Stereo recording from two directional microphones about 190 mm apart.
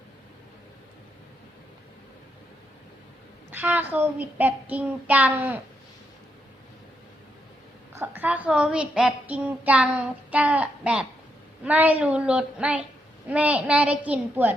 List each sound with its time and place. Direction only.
3.5 s a woman's voice: 10° right (ahead or behind)
7.9 s a woman's voice: 10° right (ahead or behind)